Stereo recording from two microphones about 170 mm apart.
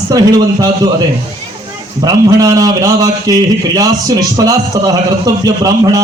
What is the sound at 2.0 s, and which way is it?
A man's voice, 20° right (ahead or behind).